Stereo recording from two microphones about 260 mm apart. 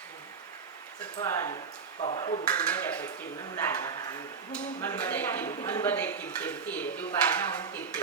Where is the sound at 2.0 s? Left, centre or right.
Left.